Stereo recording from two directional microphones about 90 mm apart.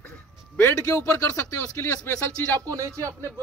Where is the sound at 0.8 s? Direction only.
35° left (ahead or behind).